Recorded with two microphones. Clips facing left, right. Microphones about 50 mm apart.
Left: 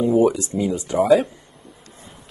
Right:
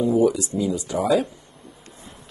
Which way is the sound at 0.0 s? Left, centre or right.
Left.